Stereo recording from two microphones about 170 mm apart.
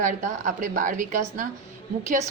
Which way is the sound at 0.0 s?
45° right (ahead or behind).